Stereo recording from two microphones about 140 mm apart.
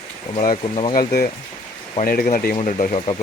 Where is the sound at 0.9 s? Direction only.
90° left.